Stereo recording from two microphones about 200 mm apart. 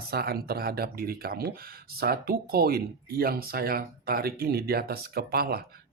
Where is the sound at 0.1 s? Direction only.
50° right (ahead or behind).